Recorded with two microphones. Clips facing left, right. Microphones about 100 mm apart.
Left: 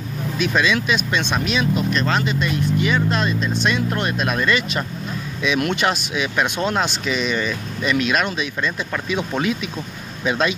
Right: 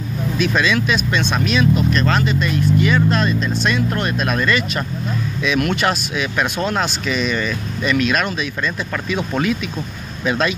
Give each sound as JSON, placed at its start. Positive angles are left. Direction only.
{"t": 0.4, "sound": "speech", "side_deg": 10}